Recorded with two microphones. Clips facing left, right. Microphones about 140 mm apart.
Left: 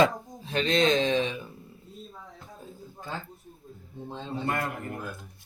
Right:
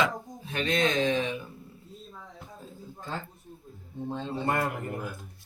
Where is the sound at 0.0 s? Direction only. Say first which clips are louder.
Left 5 dB; 25° left (ahead or behind).